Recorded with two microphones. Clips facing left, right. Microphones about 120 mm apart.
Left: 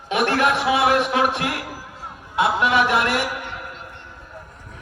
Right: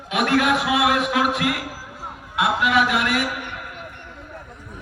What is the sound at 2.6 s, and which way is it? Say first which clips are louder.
Speech: even; 30° left (ahead or behind).